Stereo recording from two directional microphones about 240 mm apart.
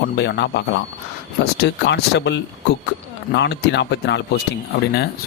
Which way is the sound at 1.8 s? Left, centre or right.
Left.